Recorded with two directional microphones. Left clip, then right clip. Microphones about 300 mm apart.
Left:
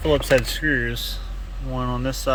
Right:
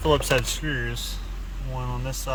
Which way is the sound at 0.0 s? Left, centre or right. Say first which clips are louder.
Left 3 dB; centre.